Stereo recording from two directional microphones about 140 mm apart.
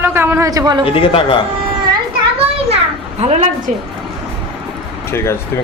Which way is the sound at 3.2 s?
55° right (ahead or behind).